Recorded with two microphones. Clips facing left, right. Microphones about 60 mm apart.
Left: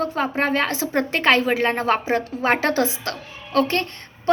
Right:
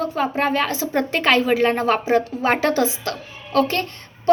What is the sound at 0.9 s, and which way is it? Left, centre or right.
A woman's voice, left.